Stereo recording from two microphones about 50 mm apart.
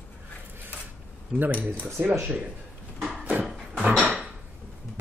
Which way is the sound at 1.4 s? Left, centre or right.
Right.